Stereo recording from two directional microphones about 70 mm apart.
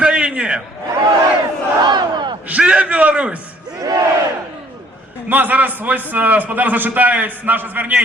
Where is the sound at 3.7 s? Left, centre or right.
Right.